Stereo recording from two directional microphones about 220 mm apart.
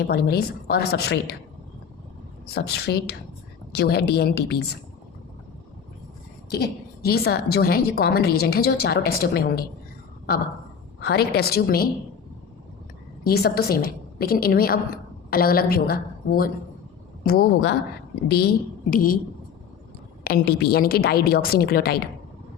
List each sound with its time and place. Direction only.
0.0 s a woman's voice: 45° left (ahead or behind)
2.6 s a woman's voice: 45° left (ahead or behind)
6.5 s a woman's voice: 45° left (ahead or behind)
11.0 s a woman's voice: 45° left (ahead or behind)
13.2 s a woman's voice: 45° left (ahead or behind)
20.2 s a woman's voice: 45° left (ahead or behind)